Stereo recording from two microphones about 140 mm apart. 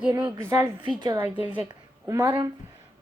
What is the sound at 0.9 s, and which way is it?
Speech, 30° right (ahead or behind).